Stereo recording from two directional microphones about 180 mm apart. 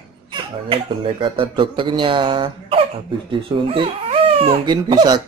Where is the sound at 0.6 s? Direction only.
30° right (ahead or behind).